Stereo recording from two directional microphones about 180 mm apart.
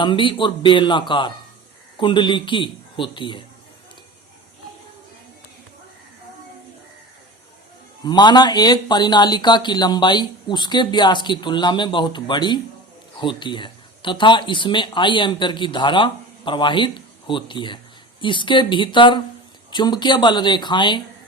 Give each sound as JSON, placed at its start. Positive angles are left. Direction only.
{"t": 0.0, "sound": "speech", "side_deg": 25}
{"t": 8.0, "sound": "speech", "side_deg": 25}